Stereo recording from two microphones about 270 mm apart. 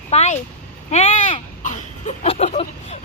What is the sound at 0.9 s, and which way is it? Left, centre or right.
Speech, left.